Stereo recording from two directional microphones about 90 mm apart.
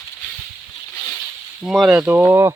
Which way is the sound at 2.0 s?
20° right (ahead or behind).